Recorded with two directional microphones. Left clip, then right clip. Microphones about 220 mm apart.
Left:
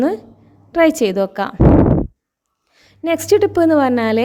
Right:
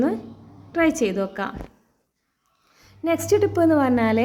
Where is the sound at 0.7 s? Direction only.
40° left (ahead or behind).